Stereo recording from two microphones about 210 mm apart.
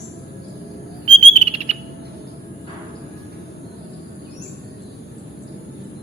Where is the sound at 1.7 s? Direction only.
30° right (ahead or behind).